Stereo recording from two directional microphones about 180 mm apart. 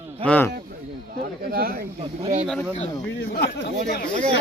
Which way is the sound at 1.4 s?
55° right (ahead or behind).